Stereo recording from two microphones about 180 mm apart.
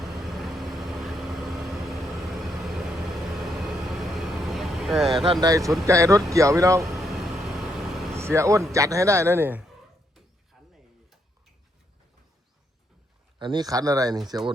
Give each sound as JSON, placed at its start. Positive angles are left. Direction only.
{"t": 0.0, "sound": "vehicle", "side_deg": 0}
{"t": 5.2, "sound": "a man's voice", "side_deg": -25}
{"t": 7.0, "sound": "vehicle", "side_deg": 0}
{"t": 8.1, "sound": "a man's voice", "side_deg": -15}
{"t": 10.5, "sound": "a sound", "side_deg": 0}
{"t": 13.4, "sound": "speech", "side_deg": -25}